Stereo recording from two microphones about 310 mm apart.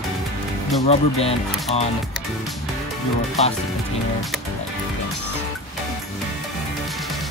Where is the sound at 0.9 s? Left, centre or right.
Centre.